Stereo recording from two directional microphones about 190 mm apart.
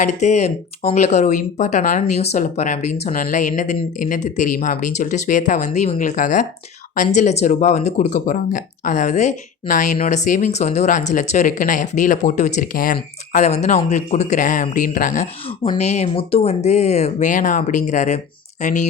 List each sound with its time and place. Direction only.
0.0 s speech: 35° left (ahead or behind)